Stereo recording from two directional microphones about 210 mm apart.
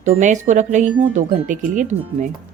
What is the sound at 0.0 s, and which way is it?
Speech, 35° right (ahead or behind).